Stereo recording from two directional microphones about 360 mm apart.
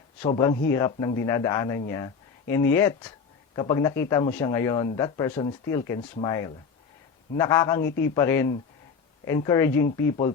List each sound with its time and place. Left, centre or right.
0.2 s speech: centre